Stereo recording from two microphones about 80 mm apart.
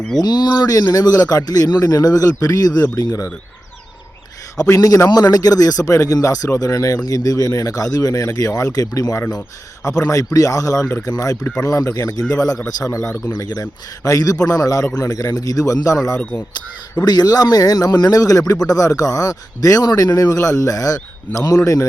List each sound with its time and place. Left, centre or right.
0.2 s speech: left
0.8 s a man's voice: left
1.0 s a man's voice: left
4.7 s a man's voice: left
13.3 s a man's voice: left
17.0 s a man's voice: left